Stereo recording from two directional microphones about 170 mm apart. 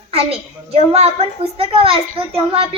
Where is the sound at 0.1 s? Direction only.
35° right (ahead or behind).